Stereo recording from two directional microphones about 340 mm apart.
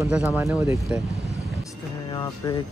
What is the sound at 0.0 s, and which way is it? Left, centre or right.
Speech, centre.